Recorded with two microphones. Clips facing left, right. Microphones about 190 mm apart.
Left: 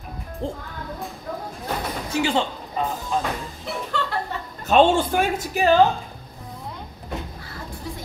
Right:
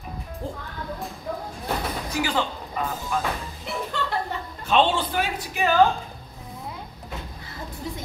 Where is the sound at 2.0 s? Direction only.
25° left (ahead or behind).